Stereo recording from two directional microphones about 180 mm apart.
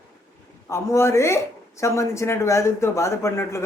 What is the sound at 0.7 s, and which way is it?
Speech, 15° left (ahead or behind).